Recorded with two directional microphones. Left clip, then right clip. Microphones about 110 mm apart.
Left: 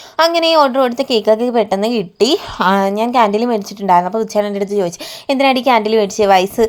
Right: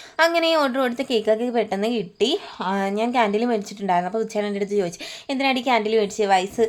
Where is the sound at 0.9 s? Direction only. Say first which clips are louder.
Left 8 dB; 30° left (ahead or behind).